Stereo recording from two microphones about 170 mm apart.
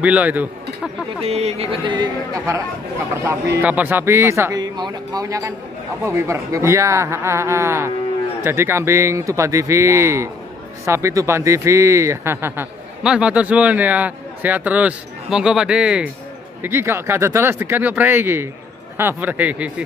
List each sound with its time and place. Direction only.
0.0 s speech: 10° right (ahead or behind)
1.2 s speech: 40° right (ahead or behind); by 2.6 s 20° right (ahead or behind)
3.6 s speech: 10° right (ahead or behind)